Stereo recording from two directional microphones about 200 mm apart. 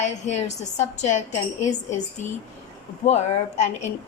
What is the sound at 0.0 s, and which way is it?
A woman's voice, 35° left (ahead or behind).